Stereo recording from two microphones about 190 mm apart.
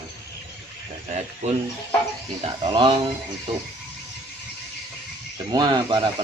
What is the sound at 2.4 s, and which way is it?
Speech, 25° right (ahead or behind).